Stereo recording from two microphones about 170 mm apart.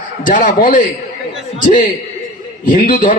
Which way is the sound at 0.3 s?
50° left (ahead or behind).